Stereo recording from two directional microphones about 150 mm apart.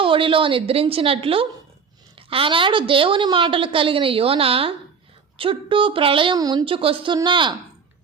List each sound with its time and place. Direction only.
0.0 s a woman's voice: 35° right (ahead or behind)